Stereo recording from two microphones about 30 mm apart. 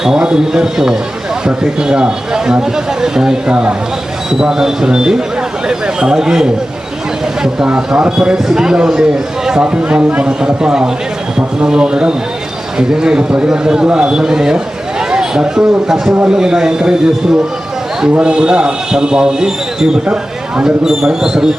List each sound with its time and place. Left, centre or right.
0.2 s a man's voice: right
4.4 s a man's voice: right
7.9 s a man's voice: right
9.6 s speech: right
10.4 s a man's voice: right
18.2 s a man's voice: right